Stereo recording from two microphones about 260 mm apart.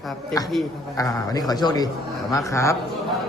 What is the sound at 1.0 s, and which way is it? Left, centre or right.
A man's voice, centre.